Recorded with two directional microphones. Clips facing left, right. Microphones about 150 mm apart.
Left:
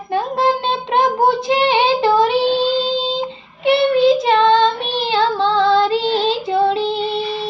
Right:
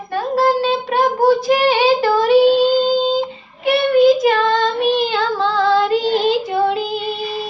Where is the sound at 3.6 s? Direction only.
25° left (ahead or behind).